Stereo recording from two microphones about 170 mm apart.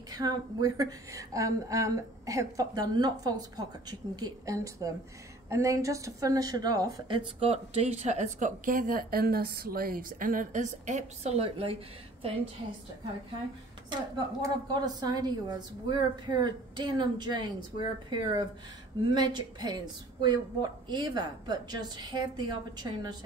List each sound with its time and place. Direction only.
0.1 s a woman's voice: 20° right (ahead or behind)
13.8 s speech: 25° right (ahead or behind)